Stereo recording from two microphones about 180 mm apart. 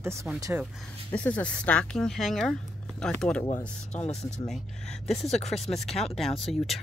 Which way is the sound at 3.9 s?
40° left (ahead or behind).